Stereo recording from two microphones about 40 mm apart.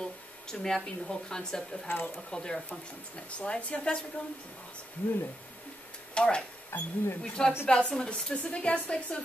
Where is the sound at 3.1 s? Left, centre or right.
Left.